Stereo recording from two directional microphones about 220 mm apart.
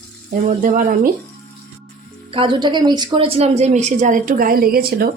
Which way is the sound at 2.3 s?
20° right (ahead or behind).